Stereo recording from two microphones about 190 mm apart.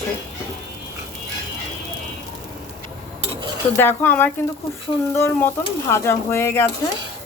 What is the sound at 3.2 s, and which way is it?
Dishes, 25° right (ahead or behind).